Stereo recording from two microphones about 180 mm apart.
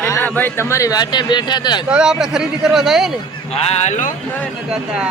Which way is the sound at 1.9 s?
5° right (ahead or behind).